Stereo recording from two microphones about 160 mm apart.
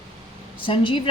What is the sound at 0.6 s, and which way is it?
Speech, 30° left (ahead or behind).